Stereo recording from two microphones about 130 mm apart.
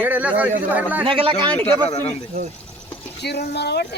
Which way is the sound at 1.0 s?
45° right (ahead or behind).